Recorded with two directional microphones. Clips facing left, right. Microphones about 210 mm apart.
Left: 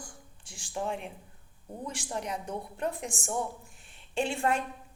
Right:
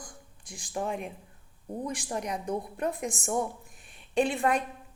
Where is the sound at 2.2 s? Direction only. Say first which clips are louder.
Right 3 dB; 15° right (ahead or behind).